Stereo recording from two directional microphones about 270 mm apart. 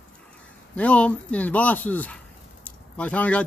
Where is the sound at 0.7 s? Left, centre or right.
Centre.